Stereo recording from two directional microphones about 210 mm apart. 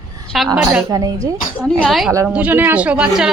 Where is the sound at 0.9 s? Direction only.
20° right (ahead or behind).